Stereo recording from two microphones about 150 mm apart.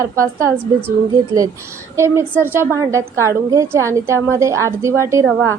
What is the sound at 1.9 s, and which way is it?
A woman's voice, 15° right (ahead or behind).